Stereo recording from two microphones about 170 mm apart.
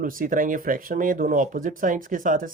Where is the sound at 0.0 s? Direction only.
55° right (ahead or behind).